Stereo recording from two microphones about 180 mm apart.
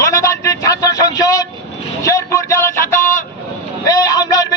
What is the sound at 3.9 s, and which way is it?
Speech, 20° left (ahead or behind).